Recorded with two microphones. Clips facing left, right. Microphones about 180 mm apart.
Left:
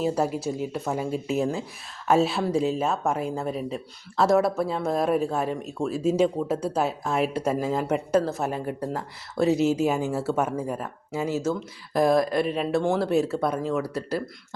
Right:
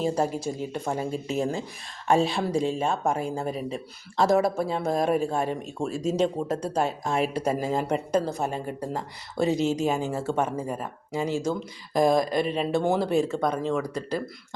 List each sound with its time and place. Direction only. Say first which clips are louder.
0.0 s speech: left 1 dB; 5° left (ahead or behind)